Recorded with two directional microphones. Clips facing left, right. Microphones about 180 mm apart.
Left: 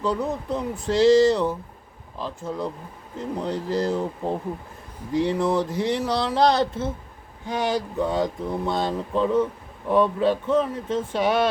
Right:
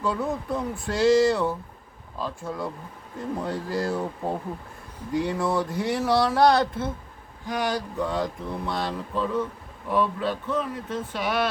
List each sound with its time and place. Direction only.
0.0 s speech: 20° left (ahead or behind)
5.4 s speech: 20° left (ahead or behind)